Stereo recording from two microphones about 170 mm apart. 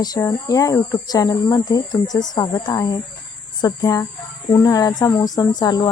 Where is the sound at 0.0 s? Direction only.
20° left (ahead or behind).